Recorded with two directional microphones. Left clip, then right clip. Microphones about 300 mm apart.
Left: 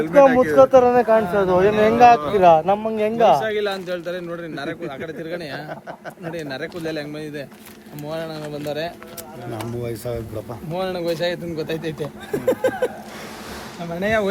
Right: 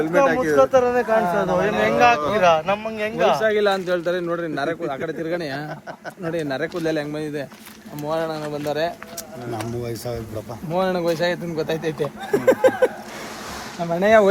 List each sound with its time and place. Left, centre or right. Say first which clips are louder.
0.5 s speech: left 4 dB; left
3.4 s a man's voice: right 4 dB; centre
9.8 s speech: left 1 dB; centre
10.8 s speech: right 3 dB; centre
13.9 s a man's voice: right 6 dB; centre